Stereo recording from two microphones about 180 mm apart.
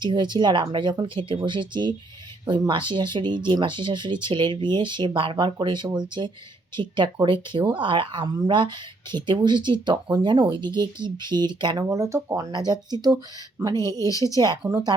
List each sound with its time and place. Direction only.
0.0 s speech: 25° right (ahead or behind)